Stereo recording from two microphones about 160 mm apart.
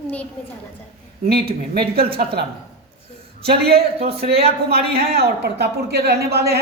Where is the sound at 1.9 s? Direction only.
70° right (ahead or behind).